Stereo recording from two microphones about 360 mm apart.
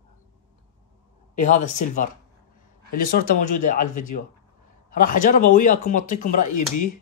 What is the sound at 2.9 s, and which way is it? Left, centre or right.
Speech, left.